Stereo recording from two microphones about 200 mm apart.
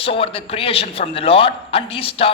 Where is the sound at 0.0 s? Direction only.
30° left (ahead or behind).